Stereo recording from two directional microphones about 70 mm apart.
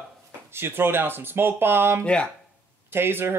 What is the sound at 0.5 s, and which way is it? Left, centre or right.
Speech, right.